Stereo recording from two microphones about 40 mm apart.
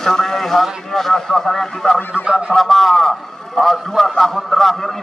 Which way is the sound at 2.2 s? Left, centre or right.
Right.